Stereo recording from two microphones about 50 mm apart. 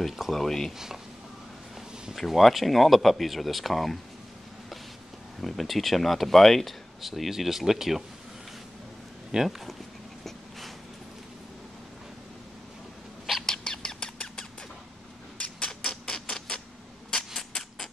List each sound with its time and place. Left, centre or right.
0.0 s speech: centre
2.1 s speech: centre
5.4 s speech: centre
9.3 s speech: centre
13.5 s bird: centre
15.3 s a sound: left